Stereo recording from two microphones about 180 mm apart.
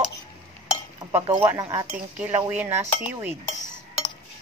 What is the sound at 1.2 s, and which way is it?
Cutlery, 25° right (ahead or behind).